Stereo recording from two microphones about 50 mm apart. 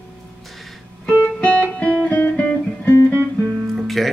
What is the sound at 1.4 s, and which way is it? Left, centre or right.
Music, left.